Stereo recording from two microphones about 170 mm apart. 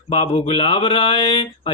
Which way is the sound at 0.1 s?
35° left (ahead or behind).